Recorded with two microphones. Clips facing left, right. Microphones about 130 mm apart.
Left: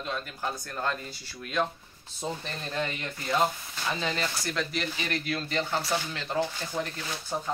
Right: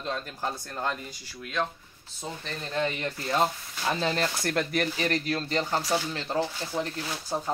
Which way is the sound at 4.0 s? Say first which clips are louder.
Right 4 dB; 40° right (ahead or behind).